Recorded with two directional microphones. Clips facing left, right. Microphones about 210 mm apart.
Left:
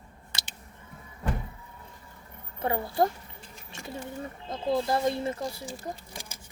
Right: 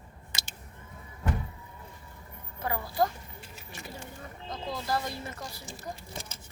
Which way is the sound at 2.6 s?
25° left (ahead or behind).